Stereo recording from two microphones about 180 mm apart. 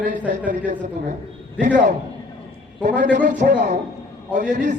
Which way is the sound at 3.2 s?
45° right (ahead or behind).